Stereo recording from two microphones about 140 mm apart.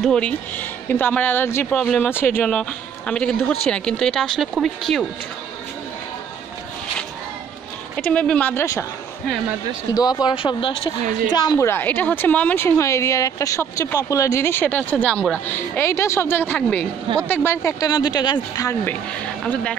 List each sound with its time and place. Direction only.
0.0 s a woman's voice: 5° left (ahead or behind)
7.9 s a woman's voice: 10° left (ahead or behind)
9.9 s speech: 25° left (ahead or behind)
11.4 s a woman's voice: 20° left (ahead or behind)
18.9 s a woman's voice: 10° left (ahead or behind)